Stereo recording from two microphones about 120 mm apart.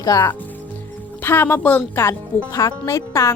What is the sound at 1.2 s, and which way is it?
Speech, 15° left (ahead or behind).